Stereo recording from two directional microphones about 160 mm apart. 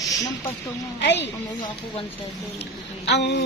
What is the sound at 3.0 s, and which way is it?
Speech, 90° left.